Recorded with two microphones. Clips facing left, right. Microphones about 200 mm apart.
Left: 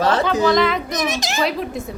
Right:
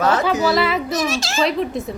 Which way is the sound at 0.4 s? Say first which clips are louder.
Left 1 dB; 5° right (ahead or behind).